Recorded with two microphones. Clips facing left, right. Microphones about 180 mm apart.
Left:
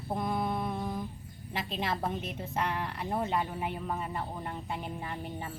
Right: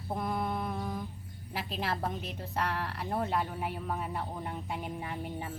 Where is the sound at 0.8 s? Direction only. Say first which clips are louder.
Left 1 dB; 10° left (ahead or behind).